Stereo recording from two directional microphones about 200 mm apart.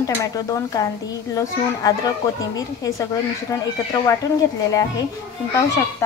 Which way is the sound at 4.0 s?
15° left (ahead or behind).